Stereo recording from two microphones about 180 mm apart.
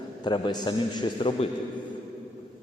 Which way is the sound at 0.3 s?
25° left (ahead or behind).